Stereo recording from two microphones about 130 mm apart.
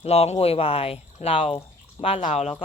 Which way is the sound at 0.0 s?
50° left (ahead or behind).